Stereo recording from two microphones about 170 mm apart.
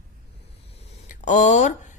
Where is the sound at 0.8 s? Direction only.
40° left (ahead or behind).